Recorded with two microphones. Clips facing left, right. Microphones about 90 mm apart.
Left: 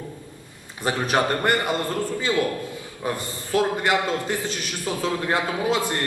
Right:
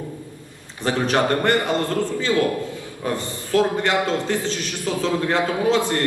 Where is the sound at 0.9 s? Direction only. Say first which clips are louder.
Right 2 dB; 15° left (ahead or behind).